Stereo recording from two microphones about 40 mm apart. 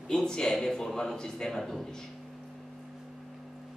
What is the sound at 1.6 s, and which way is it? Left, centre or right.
Speech, centre.